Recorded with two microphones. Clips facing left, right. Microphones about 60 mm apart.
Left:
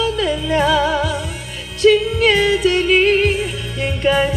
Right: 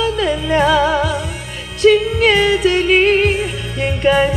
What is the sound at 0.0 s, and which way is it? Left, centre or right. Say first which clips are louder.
Music: right 2 dB; right.